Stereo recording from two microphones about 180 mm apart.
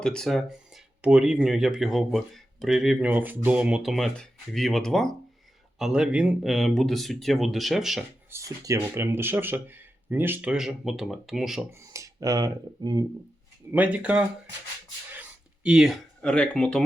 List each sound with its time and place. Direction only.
0.0 s speech: 5° left (ahead or behind)
8.3 s speech: 15° right (ahead or behind); by 11.7 s centre (ahead or behind)
11.7 s speech: 15° right (ahead or behind)
13.7 s speech: 10° right (ahead or behind)
15.1 s a sound: 5° right (ahead or behind)